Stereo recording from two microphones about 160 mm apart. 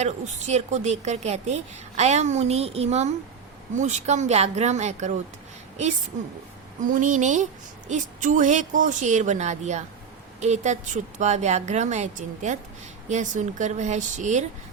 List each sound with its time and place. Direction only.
0.0 s a woman's voice: 45° right (ahead or behind)
6.9 s a woman's voice: 55° right (ahead or behind)